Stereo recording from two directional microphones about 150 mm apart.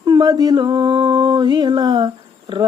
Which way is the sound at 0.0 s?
25° right (ahead or behind).